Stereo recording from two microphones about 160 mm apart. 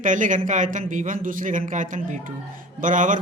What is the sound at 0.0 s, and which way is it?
A man's voice, 50° right (ahead or behind).